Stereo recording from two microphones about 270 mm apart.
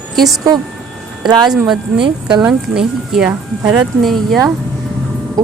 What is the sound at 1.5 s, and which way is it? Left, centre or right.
Speech, centre.